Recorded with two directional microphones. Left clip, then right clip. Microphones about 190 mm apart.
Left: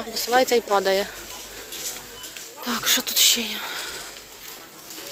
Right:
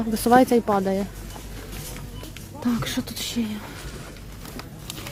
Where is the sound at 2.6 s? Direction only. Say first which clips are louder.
Left 5 dB; centre (ahead or behind).